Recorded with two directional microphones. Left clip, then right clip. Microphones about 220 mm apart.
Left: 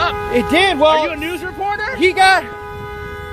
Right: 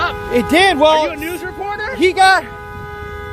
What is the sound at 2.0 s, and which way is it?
Speech, 15° right (ahead or behind).